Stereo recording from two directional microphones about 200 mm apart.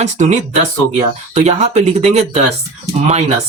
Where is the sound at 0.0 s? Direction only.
35° right (ahead or behind).